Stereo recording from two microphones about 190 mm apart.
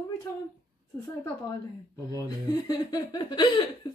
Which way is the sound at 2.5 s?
20° left (ahead or behind).